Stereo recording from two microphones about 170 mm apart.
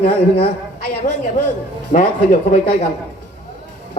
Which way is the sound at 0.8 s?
60° left (ahead or behind).